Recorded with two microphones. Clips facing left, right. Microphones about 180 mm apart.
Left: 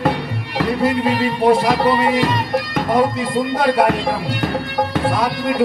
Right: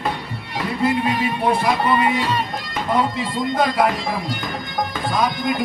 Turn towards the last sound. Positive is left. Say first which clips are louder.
# left 2 dB
turn(degrees=65)  # may be behind; listen again after turning